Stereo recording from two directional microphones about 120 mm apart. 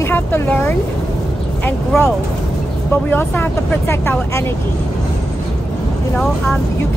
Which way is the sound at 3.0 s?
15° left (ahead or behind).